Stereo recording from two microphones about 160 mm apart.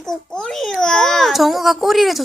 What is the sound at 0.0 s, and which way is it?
A child's voice, 5° left (ahead or behind).